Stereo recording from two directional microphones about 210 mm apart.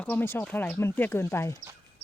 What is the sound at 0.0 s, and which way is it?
Speech, 10° left (ahead or behind).